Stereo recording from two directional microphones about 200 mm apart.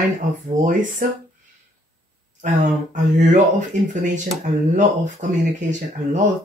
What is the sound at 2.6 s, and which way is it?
Speech, 35° right (ahead or behind).